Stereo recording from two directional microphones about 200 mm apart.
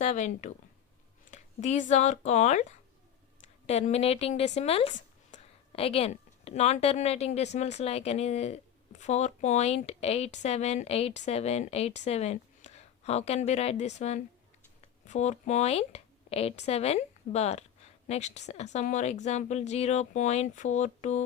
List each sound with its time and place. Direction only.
0.0 s a woman's voice: 35° left (ahead or behind)